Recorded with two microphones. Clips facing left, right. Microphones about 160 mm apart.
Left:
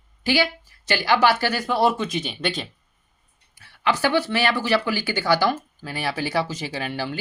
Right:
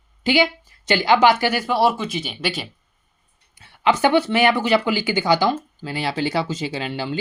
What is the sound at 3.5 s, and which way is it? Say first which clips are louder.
Speech: right 4 dB; 20° right (ahead or behind).